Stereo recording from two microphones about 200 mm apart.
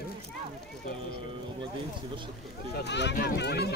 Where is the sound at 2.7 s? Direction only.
60° left (ahead or behind).